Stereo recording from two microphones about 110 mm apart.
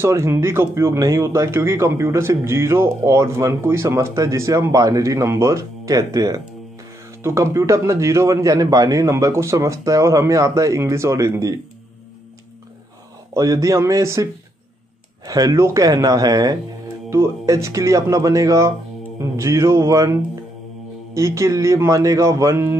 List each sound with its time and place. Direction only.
0.0 s speech: 25° right (ahead or behind)
13.3 s speech: 30° right (ahead or behind)